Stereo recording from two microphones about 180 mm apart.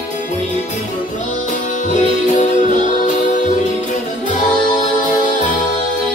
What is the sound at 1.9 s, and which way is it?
Music, 40° left (ahead or behind).